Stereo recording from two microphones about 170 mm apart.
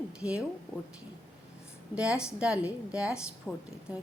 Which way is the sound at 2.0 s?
5° right (ahead or behind).